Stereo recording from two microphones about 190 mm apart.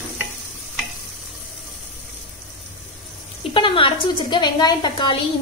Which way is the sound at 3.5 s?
25° left (ahead or behind).